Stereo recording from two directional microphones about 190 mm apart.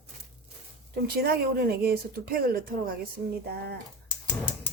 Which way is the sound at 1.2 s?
55° right (ahead or behind).